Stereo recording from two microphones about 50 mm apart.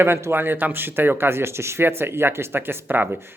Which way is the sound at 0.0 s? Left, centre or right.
Right.